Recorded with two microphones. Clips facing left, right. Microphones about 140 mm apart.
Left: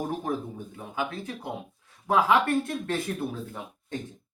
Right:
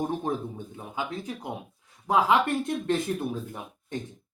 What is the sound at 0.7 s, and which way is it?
Speech, 20° right (ahead or behind).